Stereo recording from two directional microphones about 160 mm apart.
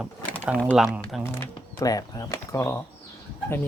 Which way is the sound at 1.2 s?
20° left (ahead or behind).